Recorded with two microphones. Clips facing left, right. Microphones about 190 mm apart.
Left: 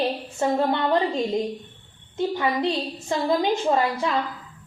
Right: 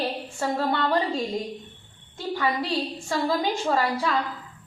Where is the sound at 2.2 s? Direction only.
20° left (ahead or behind).